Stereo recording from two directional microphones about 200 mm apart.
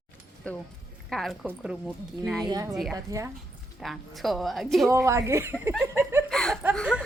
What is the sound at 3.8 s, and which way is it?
Speech, centre (ahead or behind).